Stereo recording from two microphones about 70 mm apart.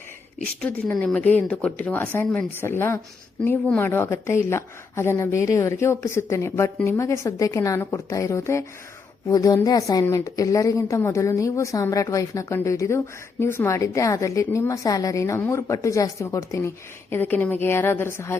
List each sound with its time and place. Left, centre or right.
0.9 s speech: centre
1.9 s a woman's voice: left
9.3 s a woman's voice: left